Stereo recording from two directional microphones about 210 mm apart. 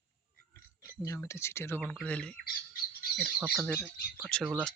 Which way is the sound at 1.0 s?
15° left (ahead or behind).